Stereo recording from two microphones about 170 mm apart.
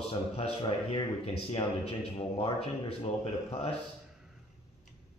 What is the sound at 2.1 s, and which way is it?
A man's voice, 35° left (ahead or behind).